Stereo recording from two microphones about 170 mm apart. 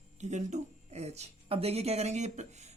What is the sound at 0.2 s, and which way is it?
Speech, 45° right (ahead or behind).